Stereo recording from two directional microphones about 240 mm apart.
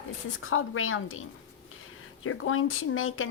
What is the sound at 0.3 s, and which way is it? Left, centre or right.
Speech, left.